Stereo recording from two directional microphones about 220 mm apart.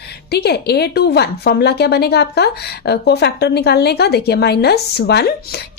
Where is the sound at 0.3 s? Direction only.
50° left (ahead or behind).